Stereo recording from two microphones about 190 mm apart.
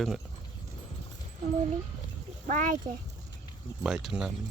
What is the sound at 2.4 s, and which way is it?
Speech, 45° right (ahead or behind).